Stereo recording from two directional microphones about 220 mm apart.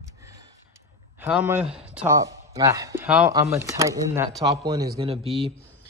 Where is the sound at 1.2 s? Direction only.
5° right (ahead or behind).